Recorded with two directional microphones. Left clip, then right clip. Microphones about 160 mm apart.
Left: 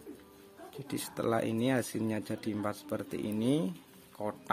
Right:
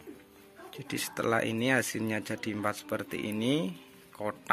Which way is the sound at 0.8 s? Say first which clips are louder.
Right 3 dB; 10° left (ahead or behind).